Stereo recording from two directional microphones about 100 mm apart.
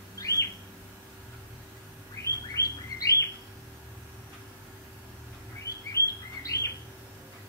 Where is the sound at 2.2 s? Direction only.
30° left (ahead or behind).